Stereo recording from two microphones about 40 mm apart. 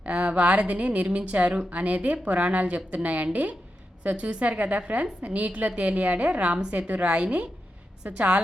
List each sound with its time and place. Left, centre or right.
0.0 s a woman's voice: right